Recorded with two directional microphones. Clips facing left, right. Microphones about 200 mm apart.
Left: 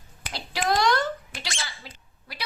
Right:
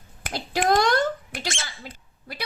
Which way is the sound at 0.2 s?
50° right (ahead or behind).